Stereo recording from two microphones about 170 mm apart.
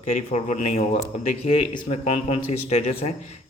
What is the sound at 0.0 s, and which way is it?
Speech, 45° left (ahead or behind).